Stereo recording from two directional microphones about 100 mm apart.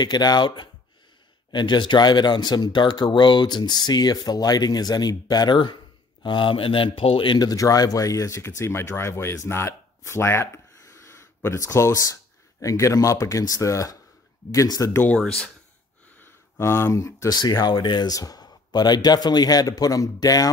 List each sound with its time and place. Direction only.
0.0 s speech: 45° left (ahead or behind)
14.9 s speech: 20° left (ahead or behind)
15.1 s speech: 10° left (ahead or behind)
16.2 s speech: 25° left (ahead or behind)